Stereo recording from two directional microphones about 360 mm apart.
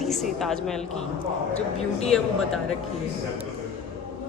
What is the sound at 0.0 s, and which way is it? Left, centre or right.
Speech, centre.